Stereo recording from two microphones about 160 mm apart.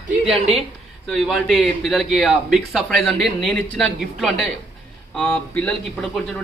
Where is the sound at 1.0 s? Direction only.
Centre (ahead or behind).